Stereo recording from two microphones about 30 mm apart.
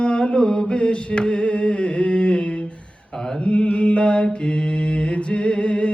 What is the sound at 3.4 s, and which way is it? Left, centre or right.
Mantra, left.